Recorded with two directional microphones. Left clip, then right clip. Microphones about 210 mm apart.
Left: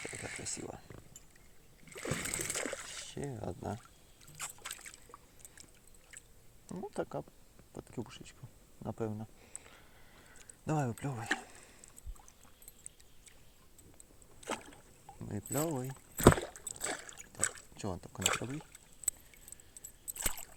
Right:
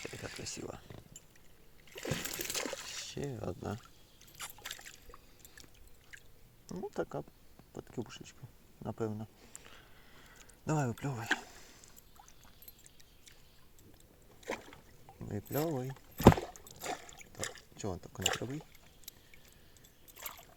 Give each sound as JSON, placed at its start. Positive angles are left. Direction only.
{"t": 0.2, "sound": "a sound", "side_deg": 0}
{"t": 6.1, "sound": "chewing", "side_deg": 5}
{"t": 6.7, "sound": "speech", "side_deg": 0}
{"t": 8.8, "sound": "a sound", "side_deg": 0}
{"t": 15.2, "sound": "speech", "side_deg": 5}
{"t": 16.2, "sound": "rowboat", "side_deg": 20}